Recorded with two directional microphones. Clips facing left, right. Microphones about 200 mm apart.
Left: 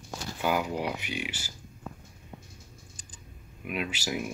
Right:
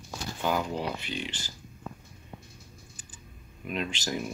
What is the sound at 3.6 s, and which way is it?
Speech, 5° left (ahead or behind).